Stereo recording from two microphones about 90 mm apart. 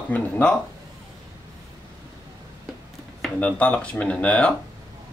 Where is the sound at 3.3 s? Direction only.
15° left (ahead or behind).